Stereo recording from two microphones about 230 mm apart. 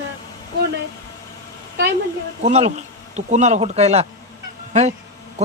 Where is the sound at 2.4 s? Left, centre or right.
Right.